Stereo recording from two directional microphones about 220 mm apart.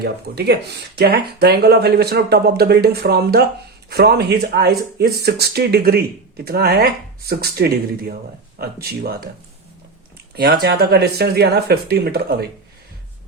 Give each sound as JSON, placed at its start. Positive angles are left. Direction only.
{"t": 0.0, "sound": "speech", "side_deg": -45}
{"t": 10.3, "sound": "speech", "side_deg": -45}